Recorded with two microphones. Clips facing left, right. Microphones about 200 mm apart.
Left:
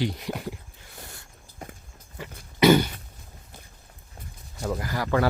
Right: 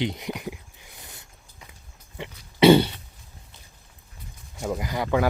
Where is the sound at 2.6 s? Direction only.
30° right (ahead or behind).